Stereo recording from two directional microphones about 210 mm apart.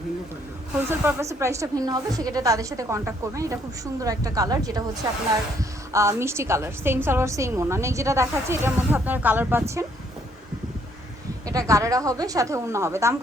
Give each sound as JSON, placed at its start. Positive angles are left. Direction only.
{"t": 0.9, "sound": "a woman's voice", "side_deg": -10}
{"t": 5.9, "sound": "a woman's voice", "side_deg": -15}
{"t": 11.4, "sound": "a woman's voice", "side_deg": -15}